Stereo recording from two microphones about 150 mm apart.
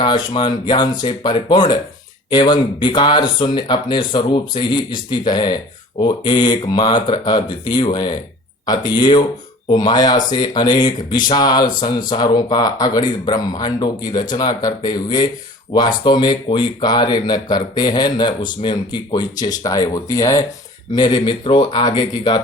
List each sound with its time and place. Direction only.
0.0 s speech: 30° left (ahead or behind)